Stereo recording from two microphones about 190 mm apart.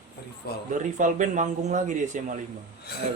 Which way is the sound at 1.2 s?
40° right (ahead or behind).